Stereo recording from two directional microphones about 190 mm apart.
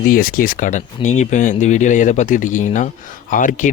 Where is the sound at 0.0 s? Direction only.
50° left (ahead or behind).